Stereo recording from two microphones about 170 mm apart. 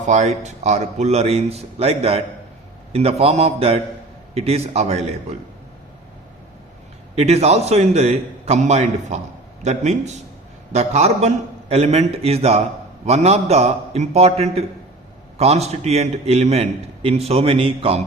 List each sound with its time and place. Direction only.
0.1 s a man's voice: 45° right (ahead or behind)
7.2 s a man's voice: 40° right (ahead or behind)